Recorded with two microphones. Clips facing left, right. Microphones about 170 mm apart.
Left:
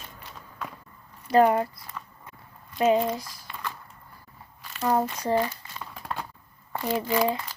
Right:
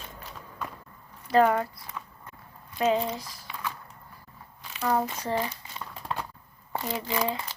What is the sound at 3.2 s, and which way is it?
Crumpling, 10° right (ahead or behind).